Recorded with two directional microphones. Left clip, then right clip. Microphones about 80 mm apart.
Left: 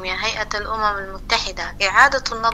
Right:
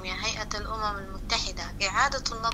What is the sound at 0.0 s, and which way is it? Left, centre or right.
A woman's voice, left.